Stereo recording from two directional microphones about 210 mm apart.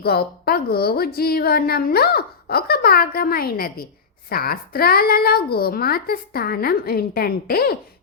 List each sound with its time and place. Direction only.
0.0 s a woman's voice: 45° left (ahead or behind)